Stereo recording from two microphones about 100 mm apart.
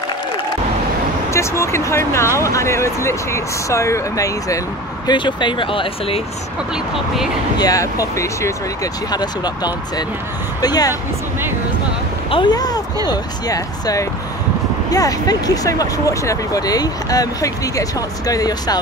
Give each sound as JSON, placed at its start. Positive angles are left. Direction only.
{"t": 1.3, "sound": "speech", "side_deg": 30}
{"t": 5.0, "sound": "speech", "side_deg": 50}
{"t": 7.5, "sound": "speech", "side_deg": 35}
{"t": 9.1, "sound": "speech", "side_deg": 45}
{"t": 12.4, "sound": "speech", "side_deg": 40}